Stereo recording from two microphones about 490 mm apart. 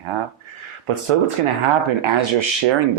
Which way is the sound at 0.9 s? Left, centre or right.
Right.